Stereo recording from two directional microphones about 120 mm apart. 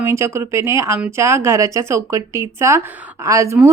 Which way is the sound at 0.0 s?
20° right (ahead or behind).